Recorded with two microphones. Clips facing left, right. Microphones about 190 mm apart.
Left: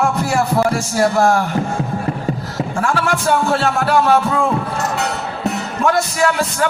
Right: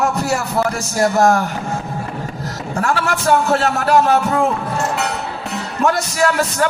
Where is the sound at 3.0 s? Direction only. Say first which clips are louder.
Right 2 dB; 40° right (ahead or behind).